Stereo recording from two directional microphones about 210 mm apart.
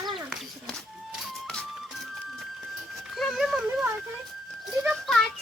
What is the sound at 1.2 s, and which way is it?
Keys jangling, 5° left (ahead or behind).